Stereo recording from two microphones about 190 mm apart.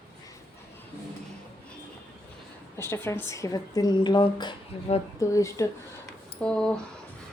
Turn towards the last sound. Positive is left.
turn(degrees=5)  # may be behind; listen again after turning